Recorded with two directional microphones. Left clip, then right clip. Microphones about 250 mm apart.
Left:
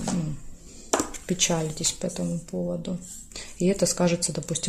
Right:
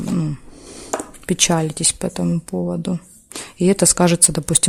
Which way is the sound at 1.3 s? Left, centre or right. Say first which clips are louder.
Right 9 dB; right.